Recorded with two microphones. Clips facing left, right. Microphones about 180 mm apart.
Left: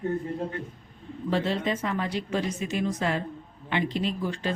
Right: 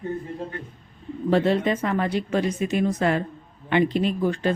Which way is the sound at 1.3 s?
55° right (ahead or behind).